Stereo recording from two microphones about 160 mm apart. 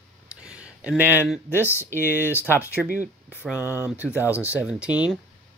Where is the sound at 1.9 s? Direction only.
15° left (ahead or behind).